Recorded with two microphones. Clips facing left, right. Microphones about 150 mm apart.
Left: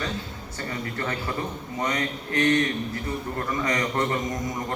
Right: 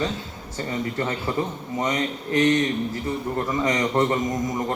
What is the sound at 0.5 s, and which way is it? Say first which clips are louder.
A man's voice: right 5 dB; 20° right (ahead or behind).